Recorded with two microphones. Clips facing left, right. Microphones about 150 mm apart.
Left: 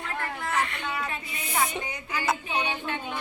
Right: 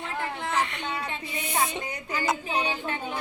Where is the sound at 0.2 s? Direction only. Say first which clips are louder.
Right 1 dB; 20° right (ahead or behind).